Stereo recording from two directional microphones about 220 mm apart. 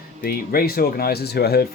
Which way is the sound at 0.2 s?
45° left (ahead or behind).